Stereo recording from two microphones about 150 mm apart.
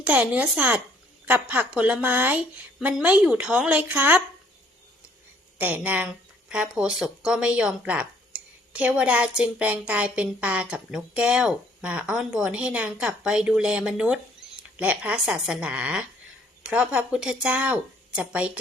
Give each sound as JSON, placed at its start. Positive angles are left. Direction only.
{"t": 0.0, "sound": "speech", "side_deg": -10}
{"t": 5.5, "sound": "speech", "side_deg": -10}